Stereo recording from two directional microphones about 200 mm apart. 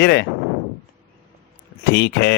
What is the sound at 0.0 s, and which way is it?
Speech, 55° left (ahead or behind).